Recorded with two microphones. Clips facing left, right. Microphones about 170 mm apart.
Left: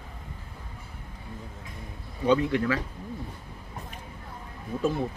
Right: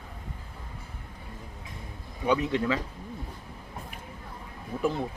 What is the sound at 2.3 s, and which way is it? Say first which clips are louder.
Speech: left 2 dB; 20° right (ahead or behind).